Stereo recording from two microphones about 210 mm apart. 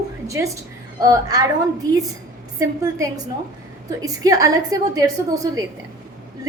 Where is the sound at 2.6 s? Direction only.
15° right (ahead or behind).